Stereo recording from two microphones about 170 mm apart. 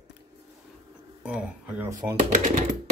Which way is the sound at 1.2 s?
5° right (ahead or behind).